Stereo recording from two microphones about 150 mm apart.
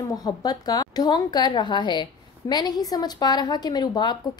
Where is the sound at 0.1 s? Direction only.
25° left (ahead or behind).